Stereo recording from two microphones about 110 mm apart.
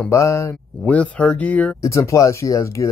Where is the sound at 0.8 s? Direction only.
10° left (ahead or behind).